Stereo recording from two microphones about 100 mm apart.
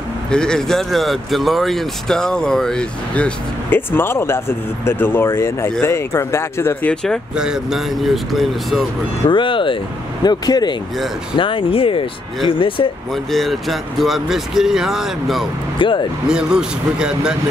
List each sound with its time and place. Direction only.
0.3 s speech: 5° left (ahead or behind)
3.7 s speech: 20° left (ahead or behind)
6.9 s speech: 10° left (ahead or behind)
7.3 s speech: 5° right (ahead or behind)
9.3 s speech: 55° left (ahead or behind)
10.2 s speech: 45° left (ahead or behind)
11.3 s speech: 60° left (ahead or behind)
13.1 s speech: centre (ahead or behind)
15.8 s speech: 60° left (ahead or behind)
16.3 s speech: 10° right (ahead or behind)